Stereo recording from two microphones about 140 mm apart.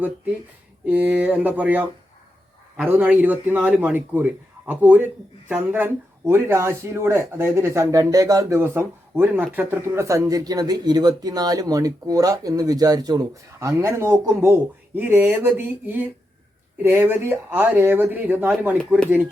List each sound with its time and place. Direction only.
0.9 s speech: 10° right (ahead or behind)